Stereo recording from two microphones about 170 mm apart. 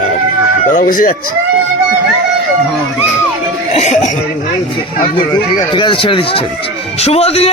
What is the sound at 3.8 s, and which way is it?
Cough, 40° left (ahead or behind).